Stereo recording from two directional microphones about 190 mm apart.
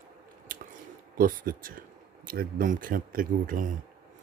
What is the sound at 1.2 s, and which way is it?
A man's voice, 45° right (ahead or behind).